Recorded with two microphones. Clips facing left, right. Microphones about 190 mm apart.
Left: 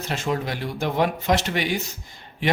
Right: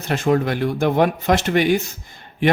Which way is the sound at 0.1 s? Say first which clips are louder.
Right 8 dB; 55° right (ahead or behind).